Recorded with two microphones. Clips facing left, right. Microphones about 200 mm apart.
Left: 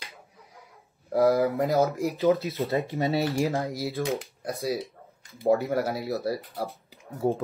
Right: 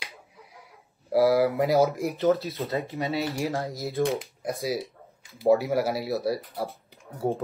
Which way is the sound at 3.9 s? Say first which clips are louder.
Right 3 dB; centre (ahead or behind).